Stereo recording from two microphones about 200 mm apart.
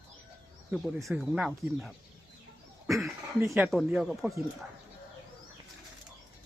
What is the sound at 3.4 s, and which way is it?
Speech, 10° right (ahead or behind).